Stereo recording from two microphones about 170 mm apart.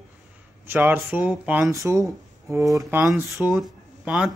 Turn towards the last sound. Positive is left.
turn(degrees=-5)  # may be behind; listen again after turning